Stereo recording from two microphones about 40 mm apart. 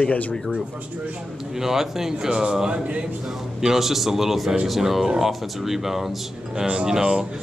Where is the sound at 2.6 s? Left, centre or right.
Right.